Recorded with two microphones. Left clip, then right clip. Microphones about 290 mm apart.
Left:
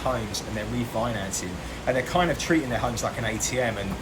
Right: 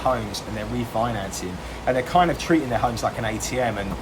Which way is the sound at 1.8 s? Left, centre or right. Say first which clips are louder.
Right 4 dB; centre.